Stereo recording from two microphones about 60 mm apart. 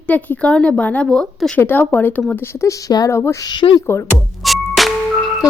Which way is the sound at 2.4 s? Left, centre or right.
Left.